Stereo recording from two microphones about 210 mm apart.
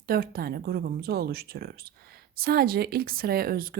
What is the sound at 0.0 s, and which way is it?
Speech, 45° right (ahead or behind).